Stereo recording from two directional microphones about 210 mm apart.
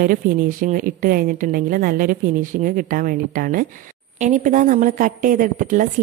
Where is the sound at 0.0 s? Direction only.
40° right (ahead or behind).